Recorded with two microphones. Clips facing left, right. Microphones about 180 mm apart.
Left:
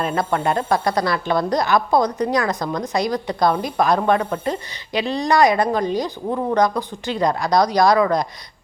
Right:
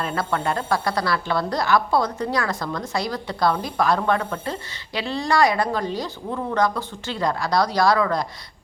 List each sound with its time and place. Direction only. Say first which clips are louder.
0.0 s a woman's voice: left 4 dB; 20° left (ahead or behind)